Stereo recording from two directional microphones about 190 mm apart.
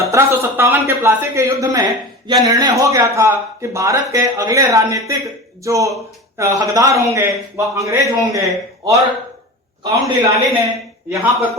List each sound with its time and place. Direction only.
0.1 s speech: 15° right (ahead or behind)